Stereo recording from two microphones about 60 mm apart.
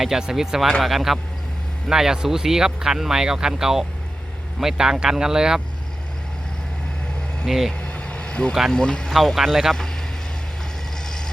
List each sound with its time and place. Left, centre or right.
0.0 s speech: centre
7.4 s speech: centre
7.7 s vehicle: centre
8.7 s speech: centre
9.1 s speech: centre